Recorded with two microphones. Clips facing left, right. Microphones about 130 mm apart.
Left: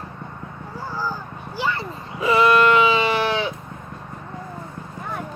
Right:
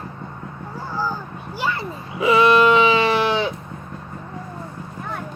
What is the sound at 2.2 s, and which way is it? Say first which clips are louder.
Sheep: right 2 dB; 15° right (ahead or behind).